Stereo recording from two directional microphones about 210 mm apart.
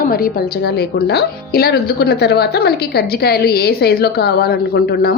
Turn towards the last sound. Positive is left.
turn(degrees=45)  # may be behind; listen again after turning